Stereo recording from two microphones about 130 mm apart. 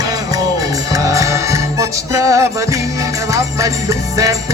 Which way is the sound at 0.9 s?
25° right (ahead or behind).